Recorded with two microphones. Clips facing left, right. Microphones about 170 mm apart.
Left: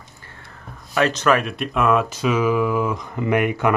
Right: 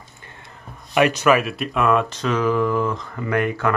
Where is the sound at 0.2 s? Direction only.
20° right (ahead or behind).